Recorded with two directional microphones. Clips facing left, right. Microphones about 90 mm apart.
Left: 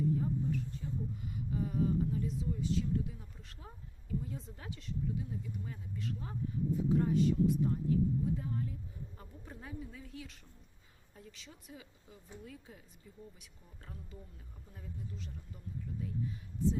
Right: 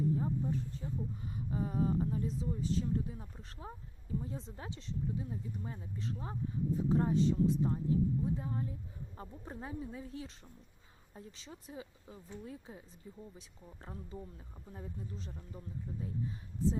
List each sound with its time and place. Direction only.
0.2 s a sound: 30° right (ahead or behind)
1.5 s speech: 35° right (ahead or behind)
13.8 s speech: 30° right (ahead or behind)